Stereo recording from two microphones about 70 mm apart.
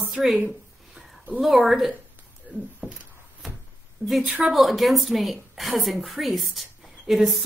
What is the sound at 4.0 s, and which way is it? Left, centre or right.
Speech, right.